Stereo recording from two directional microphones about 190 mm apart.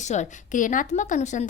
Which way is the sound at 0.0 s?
40° left (ahead or behind).